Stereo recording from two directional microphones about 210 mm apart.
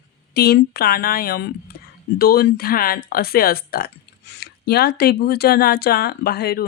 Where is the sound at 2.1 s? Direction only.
45° left (ahead or behind).